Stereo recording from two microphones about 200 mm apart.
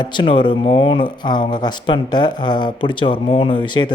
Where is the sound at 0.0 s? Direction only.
25° left (ahead or behind).